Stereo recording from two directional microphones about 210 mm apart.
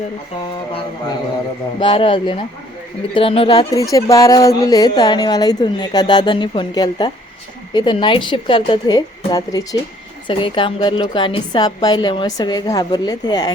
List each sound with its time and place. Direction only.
0.7 s a woman's voice: 20° left (ahead or behind)
3.9 s a woman's voice: 15° left (ahead or behind)